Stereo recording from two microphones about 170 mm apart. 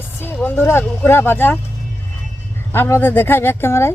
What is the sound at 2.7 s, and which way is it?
A woman's voice, 15° left (ahead or behind).